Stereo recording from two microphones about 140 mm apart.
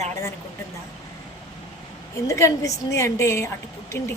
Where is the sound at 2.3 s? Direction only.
20° left (ahead or behind).